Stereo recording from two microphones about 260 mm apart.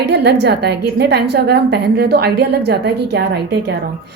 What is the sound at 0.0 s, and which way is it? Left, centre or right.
A woman's voice, right.